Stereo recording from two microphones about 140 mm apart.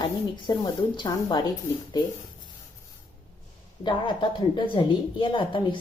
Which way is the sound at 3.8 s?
35° left (ahead or behind).